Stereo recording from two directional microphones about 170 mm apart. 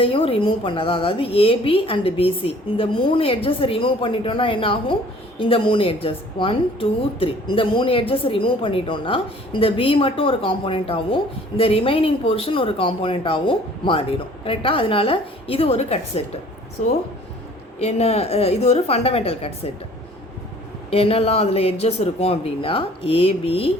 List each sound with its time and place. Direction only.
0.0 s speech: 35° left (ahead or behind)
20.9 s speech: 35° left (ahead or behind)